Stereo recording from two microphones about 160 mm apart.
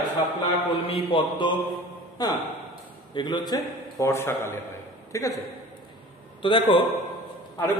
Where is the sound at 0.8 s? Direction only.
35° left (ahead or behind).